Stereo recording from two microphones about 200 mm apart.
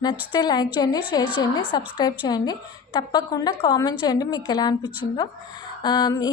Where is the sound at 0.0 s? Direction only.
20° left (ahead or behind).